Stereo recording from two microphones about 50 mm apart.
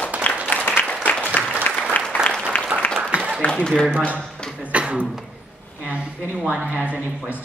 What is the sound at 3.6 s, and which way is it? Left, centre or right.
Speech, centre.